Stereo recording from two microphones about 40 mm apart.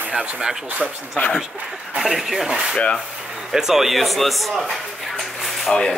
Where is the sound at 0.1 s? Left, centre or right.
Right.